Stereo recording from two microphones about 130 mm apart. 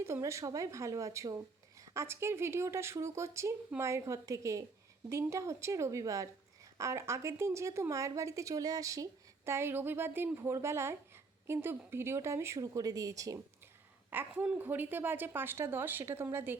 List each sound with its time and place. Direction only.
0.0 s speech: 20° right (ahead or behind)
14.1 s a woman's voice: 10° right (ahead or behind)